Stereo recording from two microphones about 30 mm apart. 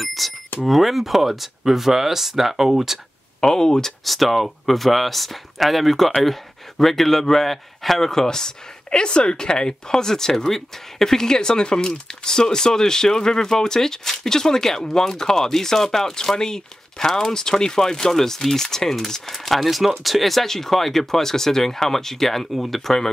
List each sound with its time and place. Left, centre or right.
0.0 s speech: centre
3.3 s speech: left
4.0 s speech: centre
19.3 s speech: centre